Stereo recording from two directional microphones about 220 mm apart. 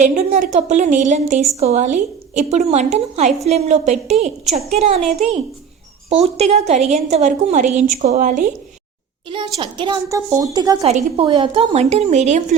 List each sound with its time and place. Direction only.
0.0 s a woman's voice: 35° right (ahead or behind)
9.3 s a woman's voice: 20° right (ahead or behind)